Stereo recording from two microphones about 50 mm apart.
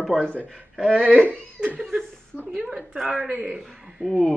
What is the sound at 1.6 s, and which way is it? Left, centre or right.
Speech, right.